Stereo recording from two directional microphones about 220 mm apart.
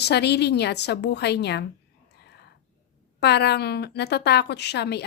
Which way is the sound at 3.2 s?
50° left (ahead or behind).